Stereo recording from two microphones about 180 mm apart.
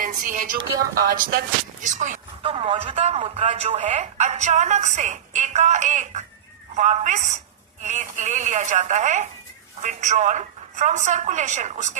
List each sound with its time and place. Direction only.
0.0 s speech: 50° right (ahead or behind)
2.4 s speech: 30° right (ahead or behind)